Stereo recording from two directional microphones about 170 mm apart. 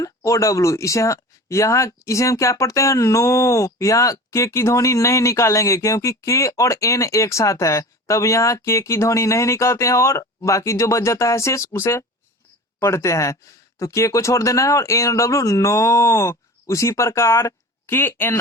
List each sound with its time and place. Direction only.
0.0 s speech: 20° left (ahead or behind)